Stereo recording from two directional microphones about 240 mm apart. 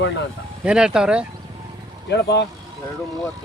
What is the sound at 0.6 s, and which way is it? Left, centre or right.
Speech, centre.